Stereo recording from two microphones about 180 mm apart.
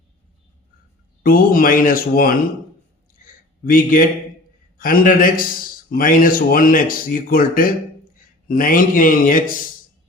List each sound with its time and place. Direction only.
1.2 s speech: 55° left (ahead or behind)
3.2 s a sound: 50° left (ahead or behind)
3.6 s speech: 50° left (ahead or behind)